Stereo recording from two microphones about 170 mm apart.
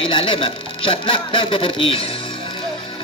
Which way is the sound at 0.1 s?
30° left (ahead or behind).